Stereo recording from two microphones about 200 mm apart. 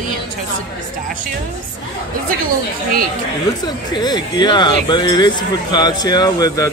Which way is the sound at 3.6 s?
20° left (ahead or behind).